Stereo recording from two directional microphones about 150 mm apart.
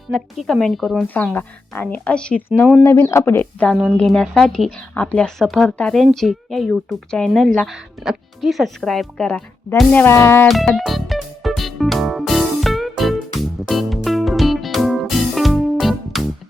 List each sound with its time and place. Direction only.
0.1 s speech: 5° left (ahead or behind)
1.1 s a woman's voice: 10° left (ahead or behind)
2.8 s a woman's voice: 20° left (ahead or behind)
3.9 s a woman's voice: 5° left (ahead or behind)
10.5 s music: centre (ahead or behind)